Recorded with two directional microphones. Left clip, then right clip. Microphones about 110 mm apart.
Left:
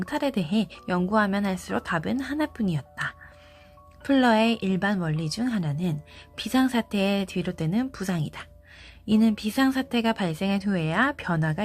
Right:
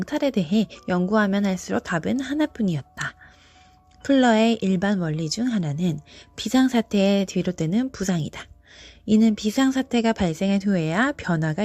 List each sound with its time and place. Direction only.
0.0 s a woman's voice: 45° right (ahead or behind)
4.0 s a woman's voice: 45° right (ahead or behind)